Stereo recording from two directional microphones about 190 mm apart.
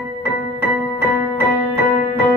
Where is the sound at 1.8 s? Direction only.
40° left (ahead or behind).